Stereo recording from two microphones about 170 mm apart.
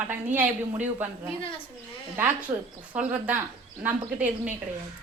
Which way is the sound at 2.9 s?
10° right (ahead or behind).